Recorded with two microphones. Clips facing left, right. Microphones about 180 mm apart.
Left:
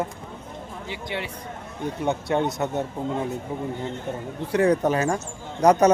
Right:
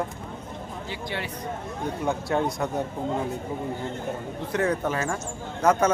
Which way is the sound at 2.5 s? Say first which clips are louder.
Left 2 dB; 20° left (ahead or behind).